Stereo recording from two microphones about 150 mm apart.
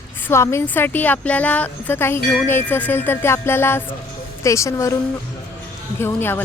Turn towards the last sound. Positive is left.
turn(degrees=15)  # may be behind; listen again after turning